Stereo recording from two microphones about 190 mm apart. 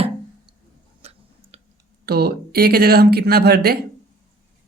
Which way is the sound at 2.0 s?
55° right (ahead or behind).